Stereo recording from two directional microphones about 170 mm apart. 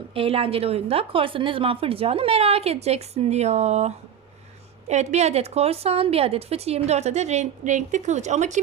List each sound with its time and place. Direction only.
0.1 s a woman's voice: 35° right (ahead or behind)